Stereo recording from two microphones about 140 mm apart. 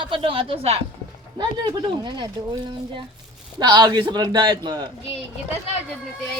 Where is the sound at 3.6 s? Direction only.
30° right (ahead or behind).